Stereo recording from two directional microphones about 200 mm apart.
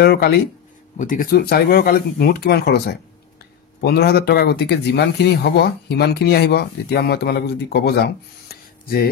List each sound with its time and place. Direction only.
0.0 s speech: 50° left (ahead or behind)